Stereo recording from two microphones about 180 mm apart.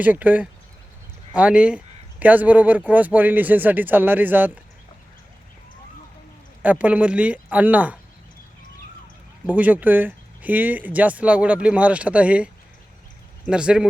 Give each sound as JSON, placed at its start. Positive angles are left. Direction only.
{"t": 0.0, "sound": "speech", "side_deg": -10}
{"t": 6.6, "sound": "speech", "side_deg": -10}
{"t": 9.5, "sound": "speech", "side_deg": -10}